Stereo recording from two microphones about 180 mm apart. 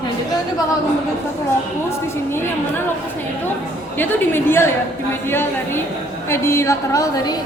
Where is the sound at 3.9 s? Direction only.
10° left (ahead or behind).